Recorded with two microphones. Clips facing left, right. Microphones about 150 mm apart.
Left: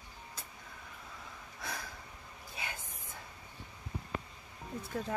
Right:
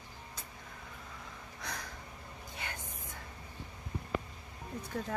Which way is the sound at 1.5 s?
5° left (ahead or behind).